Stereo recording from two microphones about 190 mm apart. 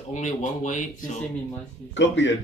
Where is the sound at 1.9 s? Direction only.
70° left (ahead or behind).